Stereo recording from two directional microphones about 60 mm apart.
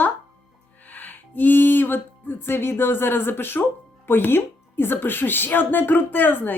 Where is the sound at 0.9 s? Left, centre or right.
Left.